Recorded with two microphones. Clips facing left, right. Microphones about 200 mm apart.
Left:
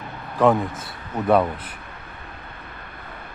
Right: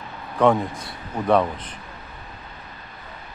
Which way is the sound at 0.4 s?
Centre (ahead or behind).